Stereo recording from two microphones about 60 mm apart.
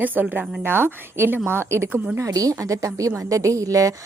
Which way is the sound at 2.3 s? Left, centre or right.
Right.